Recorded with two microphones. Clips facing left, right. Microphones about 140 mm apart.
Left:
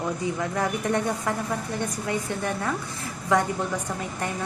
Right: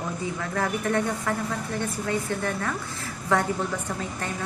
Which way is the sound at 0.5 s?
15° left (ahead or behind).